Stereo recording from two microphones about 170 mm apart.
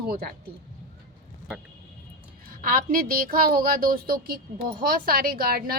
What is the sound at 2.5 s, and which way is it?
A woman's voice, 55° right (ahead or behind).